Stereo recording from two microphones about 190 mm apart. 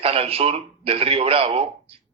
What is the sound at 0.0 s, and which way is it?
Speech, 30° right (ahead or behind).